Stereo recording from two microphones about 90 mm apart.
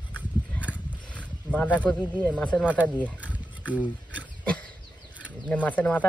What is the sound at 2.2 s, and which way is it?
Speech, 15° left (ahead or behind).